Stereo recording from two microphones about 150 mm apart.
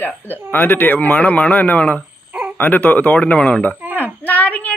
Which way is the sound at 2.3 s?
10° right (ahead or behind).